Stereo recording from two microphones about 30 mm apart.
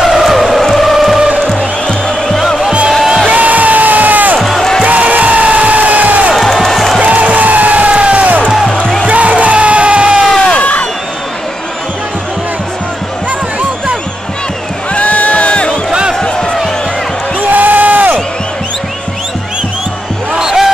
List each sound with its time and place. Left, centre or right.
0.0 s music: centre
0.9 s music: centre
2.2 s music: centre
3.3 s crowd: right
4.4 s music: centre
4.8 s music: right
6.3 s music: centre
7.0 s music: right
7.9 s music: right
15.0 s a sound: left
16.2 s a sound: left
17.4 s crowd: right
20.3 s a sound: centre